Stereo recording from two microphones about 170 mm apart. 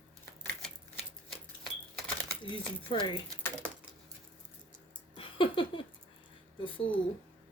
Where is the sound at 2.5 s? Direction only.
30° left (ahead or behind).